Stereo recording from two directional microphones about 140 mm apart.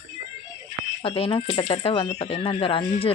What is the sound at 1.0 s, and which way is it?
Speech, 40° left (ahead or behind).